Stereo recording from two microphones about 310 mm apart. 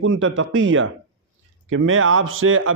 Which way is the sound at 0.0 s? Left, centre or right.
Right.